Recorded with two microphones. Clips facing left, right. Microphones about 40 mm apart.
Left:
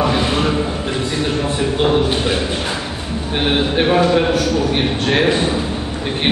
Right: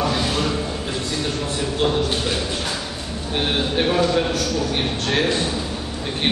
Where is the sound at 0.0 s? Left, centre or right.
Left.